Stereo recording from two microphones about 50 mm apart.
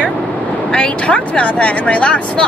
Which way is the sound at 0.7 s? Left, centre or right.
Left.